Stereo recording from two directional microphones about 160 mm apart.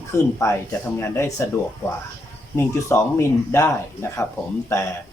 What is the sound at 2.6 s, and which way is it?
Speech, 15° left (ahead or behind).